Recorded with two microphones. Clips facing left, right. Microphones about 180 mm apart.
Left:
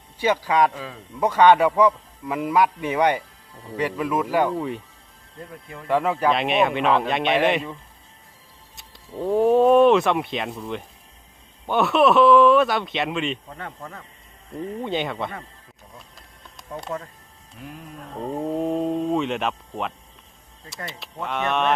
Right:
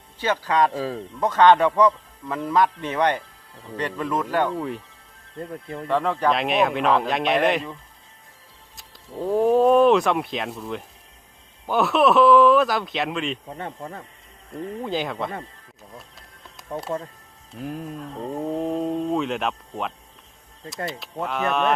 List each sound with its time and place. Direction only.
0.2 s speech: 10° left (ahead or behind)
0.7 s speech: 35° right (ahead or behind)
1.2 s speech: 10° left (ahead or behind)
5.9 s speech: 5° left (ahead or behind)
13.5 s speech: 25° right (ahead or behind)
14.8 s speech: centre (ahead or behind)
16.6 s music: 5° right (ahead or behind)
17.6 s speech: 45° right (ahead or behind)
18.3 s speech: centre (ahead or behind)
21.2 s speech: centre (ahead or behind)